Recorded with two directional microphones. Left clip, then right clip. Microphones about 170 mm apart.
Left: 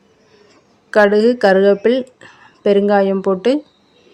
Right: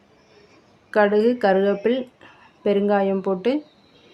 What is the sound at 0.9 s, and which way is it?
Speech, 35° left (ahead or behind).